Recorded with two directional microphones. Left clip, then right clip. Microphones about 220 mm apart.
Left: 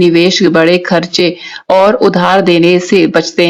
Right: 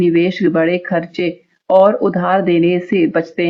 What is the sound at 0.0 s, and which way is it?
Speech, 35° left (ahead or behind).